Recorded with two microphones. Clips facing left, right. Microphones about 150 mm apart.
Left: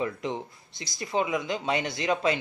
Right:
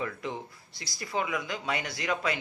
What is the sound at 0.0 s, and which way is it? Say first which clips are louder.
Speech: left 4 dB; 20° left (ahead or behind).